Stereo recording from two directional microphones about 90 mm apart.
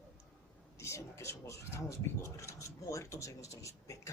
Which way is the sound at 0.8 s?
35° left (ahead or behind).